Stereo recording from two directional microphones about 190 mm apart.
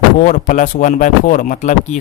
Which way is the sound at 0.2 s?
45° left (ahead or behind).